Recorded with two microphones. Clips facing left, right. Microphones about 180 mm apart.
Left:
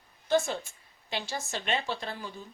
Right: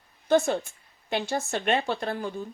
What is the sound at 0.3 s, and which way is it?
Speech, 55° right (ahead or behind).